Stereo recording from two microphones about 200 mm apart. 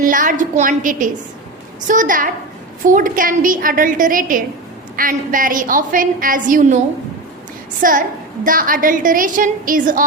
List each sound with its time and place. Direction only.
0.0 s a woman's voice: 40° right (ahead or behind)
7.8 s a woman's voice: 40° right (ahead or behind)